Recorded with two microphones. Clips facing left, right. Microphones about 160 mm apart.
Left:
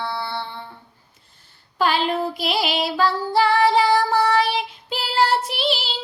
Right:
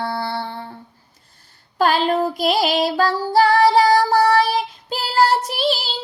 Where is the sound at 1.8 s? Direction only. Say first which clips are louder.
Right 3 dB; 40° right (ahead or behind).